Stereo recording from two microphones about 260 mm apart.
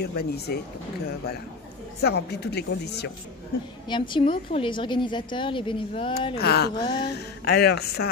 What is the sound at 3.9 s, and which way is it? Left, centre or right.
A woman's voice, centre.